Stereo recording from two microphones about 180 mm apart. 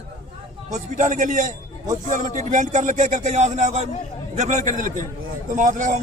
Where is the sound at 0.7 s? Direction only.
45° right (ahead or behind).